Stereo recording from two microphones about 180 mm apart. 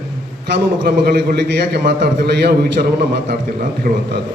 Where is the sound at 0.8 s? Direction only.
70° right (ahead or behind).